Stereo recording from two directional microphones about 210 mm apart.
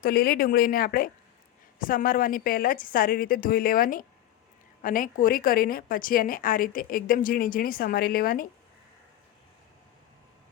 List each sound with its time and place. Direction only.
0.0 s a woman's voice: 45° left (ahead or behind)